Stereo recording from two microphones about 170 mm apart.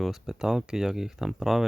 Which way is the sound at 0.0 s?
Centre (ahead or behind).